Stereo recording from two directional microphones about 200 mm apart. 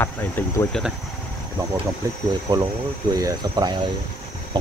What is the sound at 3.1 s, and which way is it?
Speech, 20° right (ahead or behind).